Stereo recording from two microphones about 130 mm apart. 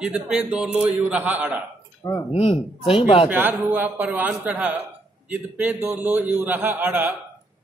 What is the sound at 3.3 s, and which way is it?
A man's voice, 15° right (ahead or behind).